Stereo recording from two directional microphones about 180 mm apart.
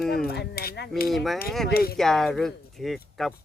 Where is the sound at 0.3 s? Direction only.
60° left (ahead or behind).